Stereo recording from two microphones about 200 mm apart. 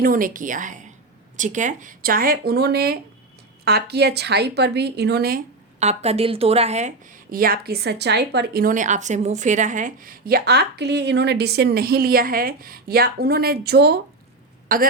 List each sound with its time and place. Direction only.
0.0 s a woman's voice: 45° right (ahead or behind)
5.8 s speech: 35° right (ahead or behind)